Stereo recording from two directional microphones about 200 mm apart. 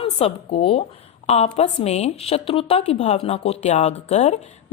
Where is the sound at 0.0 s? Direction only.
30° left (ahead or behind).